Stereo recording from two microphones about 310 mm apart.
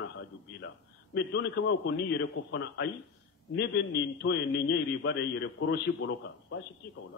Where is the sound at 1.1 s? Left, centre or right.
Left.